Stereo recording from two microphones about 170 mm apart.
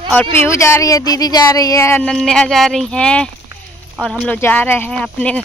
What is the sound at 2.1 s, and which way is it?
Speech, 5° left (ahead or behind).